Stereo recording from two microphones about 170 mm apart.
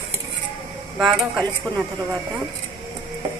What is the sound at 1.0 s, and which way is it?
Speech, centre (ahead or behind).